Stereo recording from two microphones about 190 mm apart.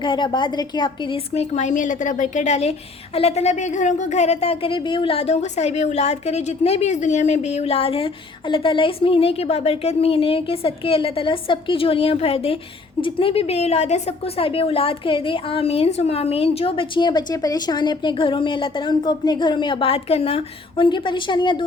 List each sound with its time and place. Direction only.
0.0 s a woman's voice: 25° left (ahead or behind)